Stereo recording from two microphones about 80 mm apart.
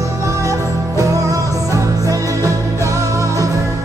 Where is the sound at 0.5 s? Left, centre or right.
Right.